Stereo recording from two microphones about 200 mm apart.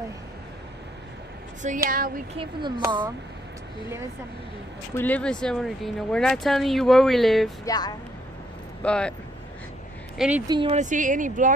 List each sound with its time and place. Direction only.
1.9 s speech: 45° right (ahead or behind)
2.3 s speech: 25° right (ahead or behind)
4.9 s speech: 10° left (ahead or behind)
7.6 s speech: 20° left (ahead or behind)
8.8 s speech: 5° left (ahead or behind)
10.1 s speech: 5° right (ahead or behind)
10.5 s speech: 25° right (ahead or behind)
10.8 s speech: 40° right (ahead or behind)